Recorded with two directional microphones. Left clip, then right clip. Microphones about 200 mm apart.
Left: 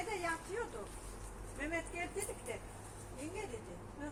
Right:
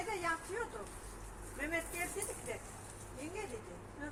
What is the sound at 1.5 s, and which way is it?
Speech, 20° left (ahead or behind).